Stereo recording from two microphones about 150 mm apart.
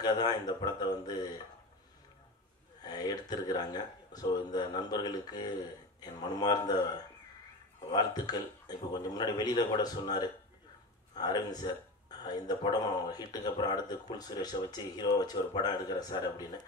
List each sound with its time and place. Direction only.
0.0 s speech: 25° left (ahead or behind)
2.8 s speech: 25° left (ahead or behind)
7.9 s speech: 25° left (ahead or behind)